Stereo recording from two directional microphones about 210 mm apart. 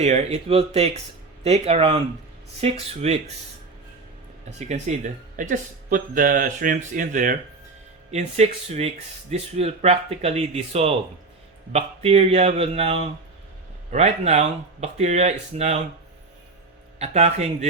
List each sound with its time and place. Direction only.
0.0 s speech: 30° right (ahead or behind)
4.9 s speech: 35° right (ahead or behind)
17.0 s speech: 30° right (ahead or behind)